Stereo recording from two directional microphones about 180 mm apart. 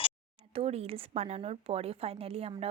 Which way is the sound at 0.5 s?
35° right (ahead or behind).